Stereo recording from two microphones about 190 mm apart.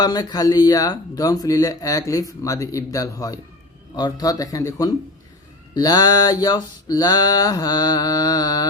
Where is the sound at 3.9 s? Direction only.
20° left (ahead or behind).